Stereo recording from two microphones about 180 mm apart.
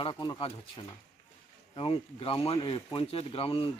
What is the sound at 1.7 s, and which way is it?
Speech, 30° left (ahead or behind).